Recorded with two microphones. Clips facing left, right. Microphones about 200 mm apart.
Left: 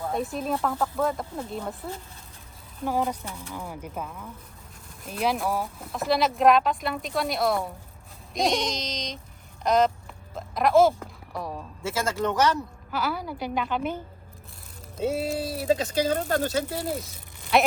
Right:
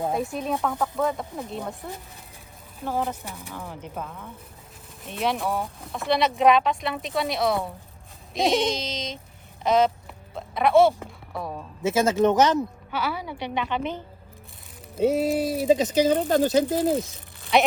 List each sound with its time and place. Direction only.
0.1 s speech: centre (ahead or behind)
3.2 s speech: 15° right (ahead or behind)
3.5 s speech: 15° left (ahead or behind)
10.3 s a sound: centre (ahead or behind)
11.8 s speech: 20° right (ahead or behind)
12.9 s speech: centre (ahead or behind)
15.0 s speech: 15° right (ahead or behind)
17.5 s speech: centre (ahead or behind)